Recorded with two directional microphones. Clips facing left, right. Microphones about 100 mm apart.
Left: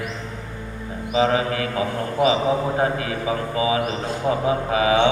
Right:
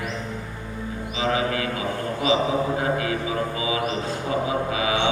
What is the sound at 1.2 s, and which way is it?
Mantra, 40° left (ahead or behind).